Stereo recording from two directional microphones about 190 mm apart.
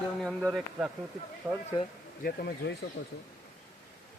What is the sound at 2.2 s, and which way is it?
Speech, 50° left (ahead or behind).